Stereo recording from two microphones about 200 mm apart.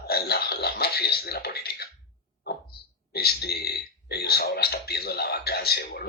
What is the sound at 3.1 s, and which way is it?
Speech, 55° left (ahead or behind).